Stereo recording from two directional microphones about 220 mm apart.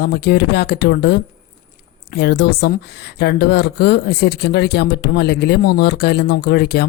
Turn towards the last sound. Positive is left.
turn(degrees=50)  # may be behind; listen again after turning